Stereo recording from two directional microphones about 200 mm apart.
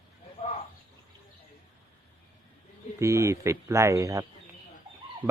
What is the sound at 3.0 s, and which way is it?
Speech, 15° right (ahead or behind).